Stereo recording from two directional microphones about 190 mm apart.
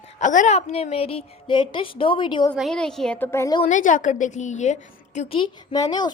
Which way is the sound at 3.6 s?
40° left (ahead or behind).